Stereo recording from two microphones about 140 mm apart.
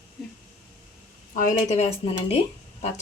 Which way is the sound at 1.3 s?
60° left (ahead or behind).